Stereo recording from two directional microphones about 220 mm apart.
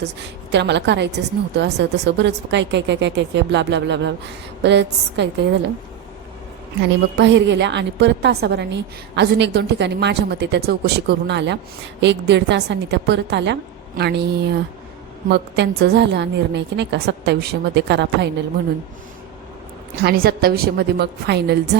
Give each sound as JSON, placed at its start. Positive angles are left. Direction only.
{"t": 0.0, "sound": "a woman's voice", "side_deg": -50}
{"t": 7.2, "sound": "a woman's voice", "side_deg": -55}
{"t": 20.0, "sound": "a woman's voice", "side_deg": -45}